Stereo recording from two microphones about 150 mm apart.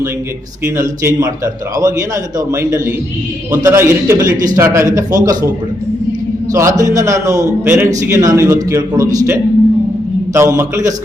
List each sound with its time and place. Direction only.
0.6 s a man's voice: 20° right (ahead or behind)
6.5 s a man's voice: 20° right (ahead or behind)